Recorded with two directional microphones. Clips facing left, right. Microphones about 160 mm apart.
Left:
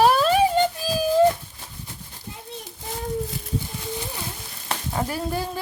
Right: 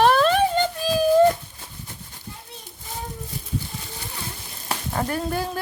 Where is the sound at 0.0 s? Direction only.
5° left (ahead or behind).